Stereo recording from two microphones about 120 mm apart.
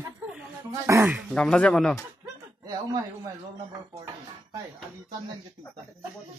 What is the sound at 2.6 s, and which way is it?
Speech, 30° right (ahead or behind).